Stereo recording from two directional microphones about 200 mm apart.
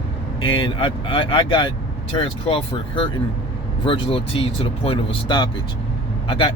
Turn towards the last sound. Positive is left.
turn(degrees=25)  # may be behind; listen again after turning